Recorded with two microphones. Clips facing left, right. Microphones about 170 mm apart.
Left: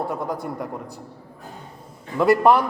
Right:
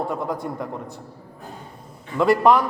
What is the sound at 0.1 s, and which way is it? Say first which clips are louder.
Speech: right 1 dB; centre (ahead or behind).